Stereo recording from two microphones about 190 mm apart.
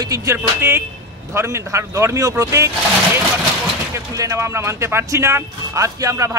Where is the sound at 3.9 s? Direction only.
15° right (ahead or behind).